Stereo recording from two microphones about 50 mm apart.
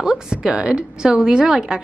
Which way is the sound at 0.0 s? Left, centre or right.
Centre.